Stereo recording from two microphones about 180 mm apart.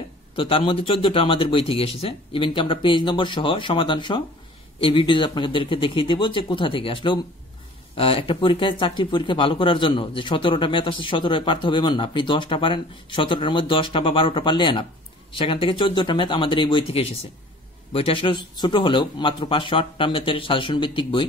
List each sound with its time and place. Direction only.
0.4 s speech: 30° left (ahead or behind)